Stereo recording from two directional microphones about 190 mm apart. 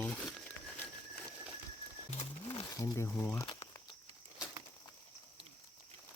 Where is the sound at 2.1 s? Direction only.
25° left (ahead or behind).